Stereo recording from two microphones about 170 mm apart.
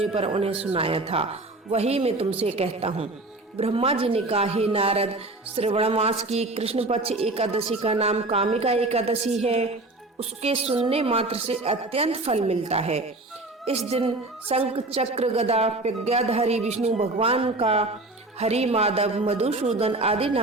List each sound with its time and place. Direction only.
0.0 s speech: 35° right (ahead or behind)